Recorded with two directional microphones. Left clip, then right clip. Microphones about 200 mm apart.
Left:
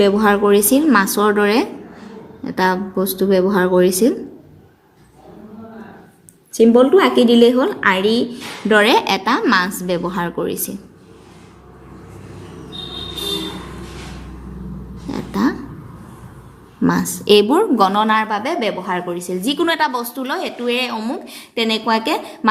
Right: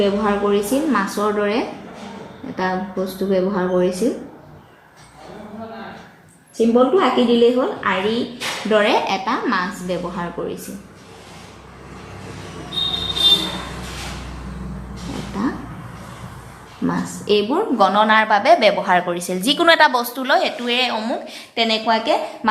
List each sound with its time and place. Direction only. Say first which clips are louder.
0.0 s a woman's voice: left 5 dB; 55° left (ahead or behind)
6.6 s a woman's voice: left 4 dB; 55° left (ahead or behind)
15.4 s a woman's voice: left 5 dB; 55° left (ahead or behind)
16.8 s a woman's voice: left 5 dB; 50° left (ahead or behind); by 22.2 s 35° left (ahead or behind)